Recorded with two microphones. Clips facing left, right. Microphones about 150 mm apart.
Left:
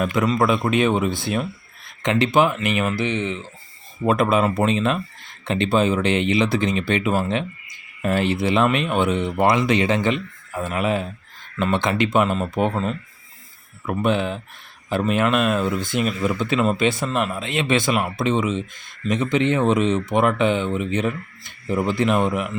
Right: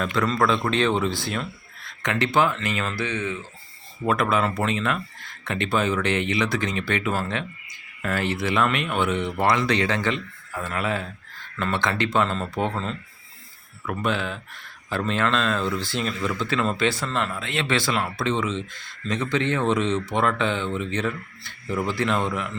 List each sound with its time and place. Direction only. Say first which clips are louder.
0.0 s speech: left 3 dB; 15° left (ahead or behind)
13.8 s speech: left 5 dB; 25° left (ahead or behind)